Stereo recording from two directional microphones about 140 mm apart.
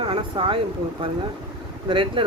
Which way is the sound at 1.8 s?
35° right (ahead or behind).